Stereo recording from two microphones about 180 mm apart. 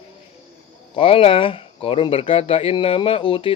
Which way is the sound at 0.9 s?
30° left (ahead or behind).